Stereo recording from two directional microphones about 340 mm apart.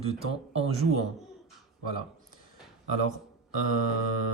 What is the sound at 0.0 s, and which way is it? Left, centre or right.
Speech, centre.